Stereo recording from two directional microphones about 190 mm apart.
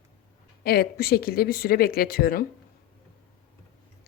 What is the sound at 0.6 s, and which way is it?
A woman's voice, 55° left (ahead or behind).